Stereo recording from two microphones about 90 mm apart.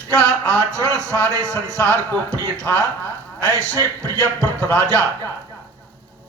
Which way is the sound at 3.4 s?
30° right (ahead or behind).